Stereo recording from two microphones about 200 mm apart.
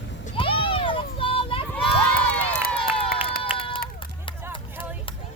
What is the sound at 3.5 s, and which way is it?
Run, 5° right (ahead or behind).